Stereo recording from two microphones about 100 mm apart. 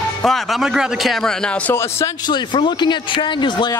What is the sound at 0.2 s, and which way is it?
Speech, centre (ahead or behind).